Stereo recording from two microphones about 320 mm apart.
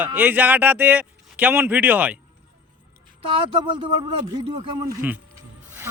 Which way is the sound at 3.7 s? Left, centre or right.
Right.